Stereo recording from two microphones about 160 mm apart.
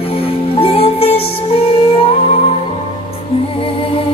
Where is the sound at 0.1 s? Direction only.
35° left (ahead or behind).